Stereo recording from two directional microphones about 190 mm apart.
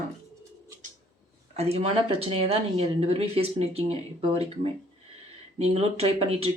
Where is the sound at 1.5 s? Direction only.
30° right (ahead or behind).